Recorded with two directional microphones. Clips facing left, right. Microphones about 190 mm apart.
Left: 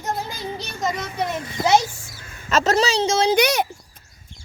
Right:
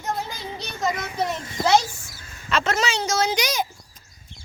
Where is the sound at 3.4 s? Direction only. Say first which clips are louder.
Left 7 dB; 65° left (ahead or behind).